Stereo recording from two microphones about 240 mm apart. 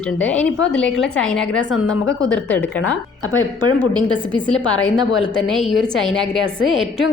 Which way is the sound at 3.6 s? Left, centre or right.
Centre.